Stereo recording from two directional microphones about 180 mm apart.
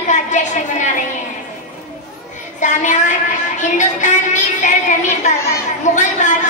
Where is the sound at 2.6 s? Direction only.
45° left (ahead or behind).